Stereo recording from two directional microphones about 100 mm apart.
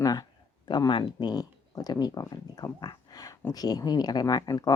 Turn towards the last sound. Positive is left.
turn(degrees=40)  # may be behind; listen again after turning